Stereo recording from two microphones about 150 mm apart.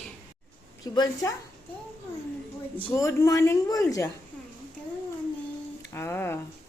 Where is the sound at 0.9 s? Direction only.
25° left (ahead or behind).